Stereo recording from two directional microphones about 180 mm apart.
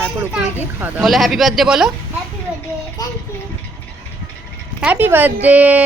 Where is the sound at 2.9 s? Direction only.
20° left (ahead or behind).